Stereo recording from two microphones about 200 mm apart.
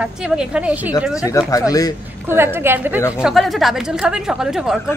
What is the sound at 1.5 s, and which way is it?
Speech, 15° left (ahead or behind).